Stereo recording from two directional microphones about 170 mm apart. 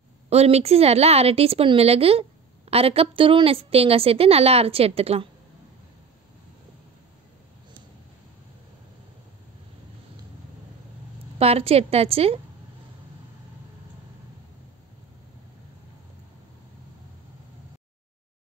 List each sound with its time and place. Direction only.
0.3 s a woman's voice: 40° right (ahead or behind)
11.3 s a woman's voice: 35° right (ahead or behind)